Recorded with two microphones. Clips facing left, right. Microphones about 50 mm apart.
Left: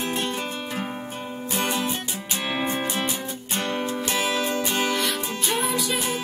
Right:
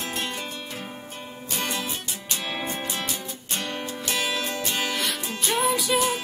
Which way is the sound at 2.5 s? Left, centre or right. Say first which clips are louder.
Left 6 dB; centre.